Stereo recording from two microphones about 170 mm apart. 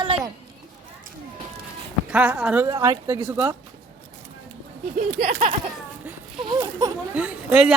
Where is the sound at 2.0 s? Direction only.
5° right (ahead or behind).